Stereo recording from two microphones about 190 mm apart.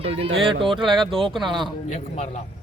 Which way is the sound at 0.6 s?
Centre (ahead or behind).